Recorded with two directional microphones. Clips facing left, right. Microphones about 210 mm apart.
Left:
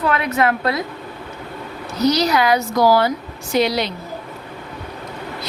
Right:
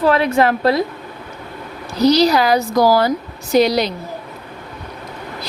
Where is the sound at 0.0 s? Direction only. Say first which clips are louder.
Right 4 dB; 30° right (ahead or behind).